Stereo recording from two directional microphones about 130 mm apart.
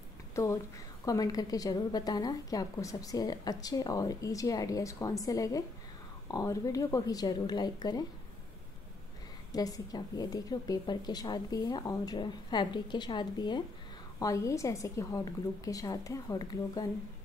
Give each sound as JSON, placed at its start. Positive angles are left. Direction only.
{"t": 1.0, "sound": "a woman's voice", "side_deg": 30}
{"t": 9.5, "sound": "a woman's voice", "side_deg": 30}
{"t": 14.2, "sound": "a woman's voice", "side_deg": 25}